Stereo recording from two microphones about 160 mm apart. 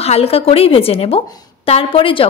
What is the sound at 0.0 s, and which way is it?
A woman's voice, 40° left (ahead or behind).